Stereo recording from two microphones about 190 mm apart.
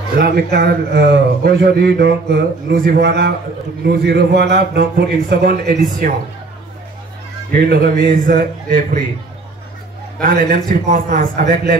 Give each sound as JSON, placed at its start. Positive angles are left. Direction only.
{"t": 0.2, "sound": "a man's voice", "side_deg": -55}
{"t": 7.5, "sound": "a man's voice", "side_deg": -55}
{"t": 10.5, "sound": "a man's voice", "side_deg": -45}